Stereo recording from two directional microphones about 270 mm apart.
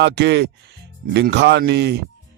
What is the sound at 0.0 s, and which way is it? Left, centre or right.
Speech, right.